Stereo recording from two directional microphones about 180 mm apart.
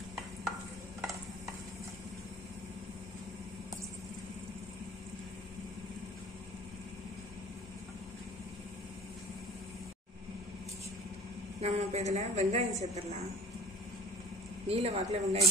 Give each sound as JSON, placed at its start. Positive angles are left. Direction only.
{"t": 11.6, "sound": "a man's voice", "side_deg": -35}
{"t": 14.7, "sound": "a man's voice", "side_deg": -35}